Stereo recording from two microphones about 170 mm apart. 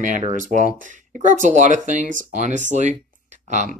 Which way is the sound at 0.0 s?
50° right (ahead or behind).